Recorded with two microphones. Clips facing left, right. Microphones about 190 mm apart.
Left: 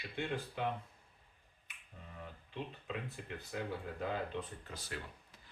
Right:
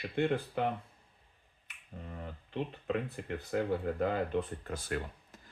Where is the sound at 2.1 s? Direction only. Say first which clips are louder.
Right 6 dB; 55° right (ahead or behind).